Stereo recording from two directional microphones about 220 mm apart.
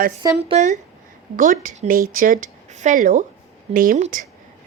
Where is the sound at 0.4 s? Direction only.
30° right (ahead or behind).